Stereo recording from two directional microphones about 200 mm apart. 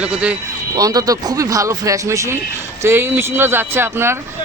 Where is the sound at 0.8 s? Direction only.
20° right (ahead or behind).